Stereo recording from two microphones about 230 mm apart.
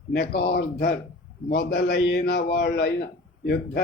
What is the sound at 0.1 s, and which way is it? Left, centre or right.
A man's voice, left.